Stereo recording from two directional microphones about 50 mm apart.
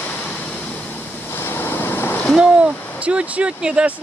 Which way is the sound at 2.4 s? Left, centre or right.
Right.